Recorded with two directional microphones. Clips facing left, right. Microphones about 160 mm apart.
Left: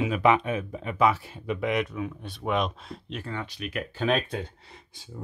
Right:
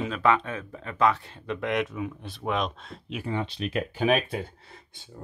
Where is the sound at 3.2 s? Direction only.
20° right (ahead or behind).